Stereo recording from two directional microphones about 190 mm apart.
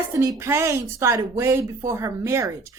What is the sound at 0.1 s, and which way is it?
A woman's voice, 15° right (ahead or behind).